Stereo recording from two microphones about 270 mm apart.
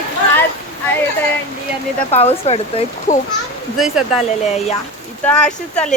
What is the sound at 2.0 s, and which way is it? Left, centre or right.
Speech, left.